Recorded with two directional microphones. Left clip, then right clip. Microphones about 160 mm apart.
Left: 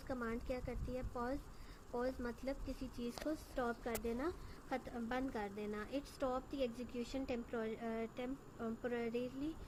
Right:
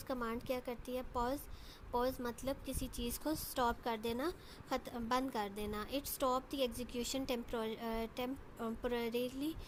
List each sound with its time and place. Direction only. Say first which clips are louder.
0.1 s a woman's voice: right 4 dB; 30° right (ahead or behind)
4.0 s a woman's voice: right 3 dB; 20° right (ahead or behind)
4.7 s a woman's voice: right 5 dB; 35° right (ahead or behind)